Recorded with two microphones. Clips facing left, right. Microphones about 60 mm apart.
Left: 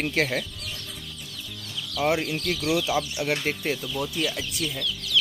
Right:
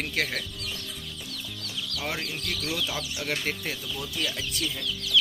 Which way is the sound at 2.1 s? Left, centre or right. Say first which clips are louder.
Left 7 dB; centre.